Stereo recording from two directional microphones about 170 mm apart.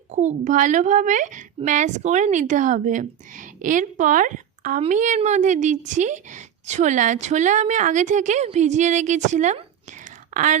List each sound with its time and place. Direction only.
0.1 s a woman's voice: 45° right (ahead or behind)